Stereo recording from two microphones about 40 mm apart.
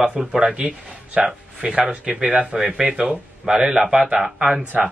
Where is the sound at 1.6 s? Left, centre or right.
Right.